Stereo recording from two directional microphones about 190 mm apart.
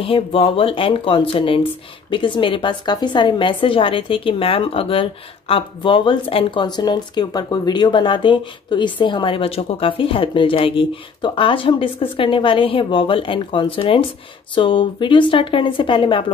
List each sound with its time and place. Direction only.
0.0 s speech: 30° left (ahead or behind)